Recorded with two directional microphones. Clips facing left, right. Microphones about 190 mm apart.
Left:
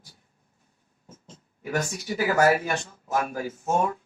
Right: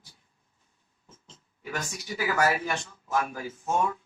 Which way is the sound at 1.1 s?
45° left (ahead or behind).